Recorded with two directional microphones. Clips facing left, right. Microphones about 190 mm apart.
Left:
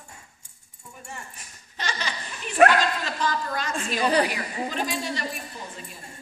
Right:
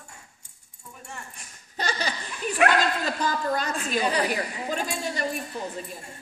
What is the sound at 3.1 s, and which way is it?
A woman's voice, 40° right (ahead or behind).